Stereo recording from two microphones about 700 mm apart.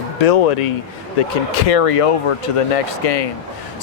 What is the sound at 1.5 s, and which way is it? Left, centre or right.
Speech, left.